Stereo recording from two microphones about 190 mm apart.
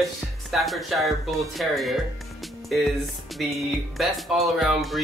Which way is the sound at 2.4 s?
Centre (ahead or behind).